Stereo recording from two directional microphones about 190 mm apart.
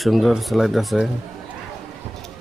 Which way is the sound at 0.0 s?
Centre (ahead or behind).